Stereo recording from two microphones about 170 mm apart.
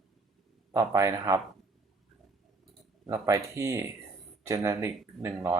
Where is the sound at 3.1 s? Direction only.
15° right (ahead or behind).